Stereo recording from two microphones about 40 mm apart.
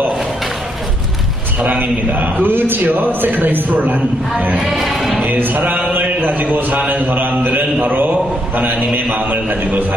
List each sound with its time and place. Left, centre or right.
1.6 s a man's voice: right
4.6 s sheep: centre
5.3 s a man's voice: right